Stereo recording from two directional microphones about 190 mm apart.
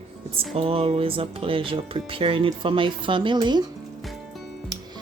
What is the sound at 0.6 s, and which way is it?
A woman's voice, 30° right (ahead or behind).